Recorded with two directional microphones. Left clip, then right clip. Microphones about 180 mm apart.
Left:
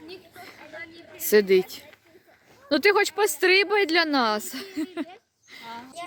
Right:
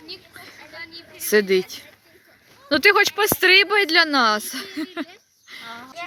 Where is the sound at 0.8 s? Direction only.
50° left (ahead or behind).